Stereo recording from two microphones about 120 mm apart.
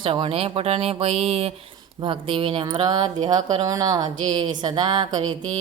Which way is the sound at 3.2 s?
35° right (ahead or behind).